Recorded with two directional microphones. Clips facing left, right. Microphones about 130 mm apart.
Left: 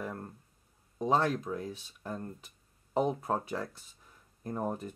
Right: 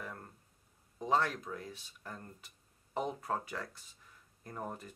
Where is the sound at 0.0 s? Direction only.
30° left (ahead or behind).